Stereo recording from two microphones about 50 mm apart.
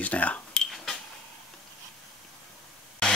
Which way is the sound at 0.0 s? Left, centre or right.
Left.